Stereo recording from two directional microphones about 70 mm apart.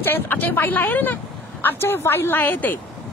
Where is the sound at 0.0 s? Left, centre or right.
Left.